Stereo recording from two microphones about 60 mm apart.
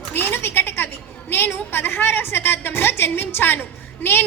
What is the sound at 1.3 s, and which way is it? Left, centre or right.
A woman's voice, left.